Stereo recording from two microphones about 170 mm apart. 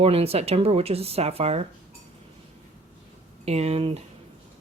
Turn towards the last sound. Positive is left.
turn(degrees=-35)  # may be behind; listen again after turning